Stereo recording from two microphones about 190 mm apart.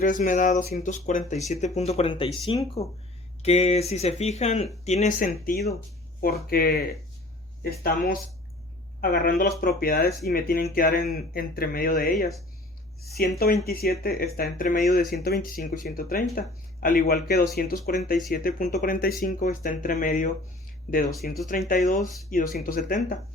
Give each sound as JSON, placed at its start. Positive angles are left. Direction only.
{"t": 0.0, "sound": "speech", "side_deg": 45}
{"t": 13.4, "sound": "speech", "side_deg": 55}